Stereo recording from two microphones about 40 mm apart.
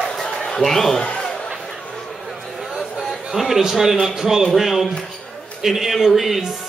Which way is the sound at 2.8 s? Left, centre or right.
Centre.